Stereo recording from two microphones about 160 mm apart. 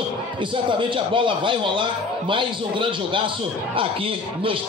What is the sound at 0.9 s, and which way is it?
A man's voice, 30° right (ahead or behind).